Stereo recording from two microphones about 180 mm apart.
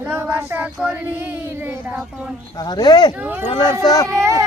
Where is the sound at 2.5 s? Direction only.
20° left (ahead or behind).